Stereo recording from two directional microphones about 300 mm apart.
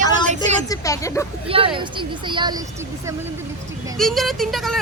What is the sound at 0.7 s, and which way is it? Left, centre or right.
Speech, centre.